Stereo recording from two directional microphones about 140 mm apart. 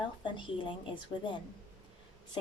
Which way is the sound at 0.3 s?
35° left (ahead or behind).